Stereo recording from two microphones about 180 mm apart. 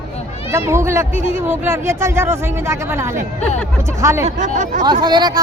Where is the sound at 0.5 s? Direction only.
15° right (ahead or behind).